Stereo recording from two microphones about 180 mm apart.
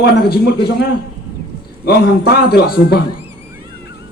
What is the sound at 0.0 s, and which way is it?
A man's voice, 60° left (ahead or behind).